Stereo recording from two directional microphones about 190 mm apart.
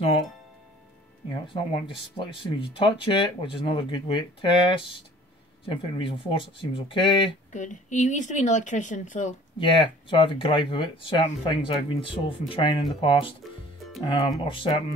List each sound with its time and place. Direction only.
1.5 s speech: 25° left (ahead or behind)
7.5 s speech: 40° left (ahead or behind)
9.6 s speech: 25° left (ahead or behind)